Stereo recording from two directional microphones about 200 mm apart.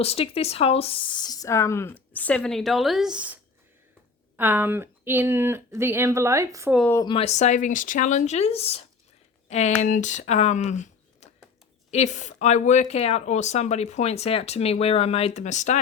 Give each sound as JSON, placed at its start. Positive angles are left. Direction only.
{"t": 0.0, "sound": "speech", "side_deg": 30}
{"t": 4.4, "sound": "speech", "side_deg": -10}
{"t": 6.7, "sound": "speech", "side_deg": 5}
{"t": 7.0, "sound": "speech", "side_deg": 25}